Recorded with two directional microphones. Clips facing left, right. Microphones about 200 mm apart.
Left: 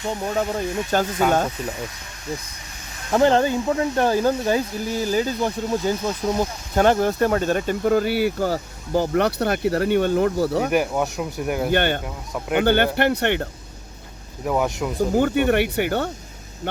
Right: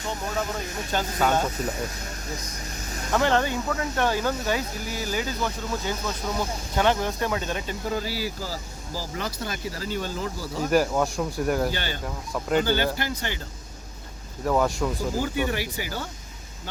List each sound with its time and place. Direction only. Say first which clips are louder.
0.9 s speech: left 6 dB; 45° left (ahead or behind)
3.1 s speech: left 6 dB; 35° left (ahead or behind); by 10.7 s 65° left (ahead or behind)
10.7 s speech: left 1 dB; 15° left (ahead or behind)
11.7 s speech: left 10 dB; 60° left (ahead or behind)
14.4 s speech: left 1 dB; 10° left (ahead or behind)
15.1 s speech: left 8 dB; 60° left (ahead or behind)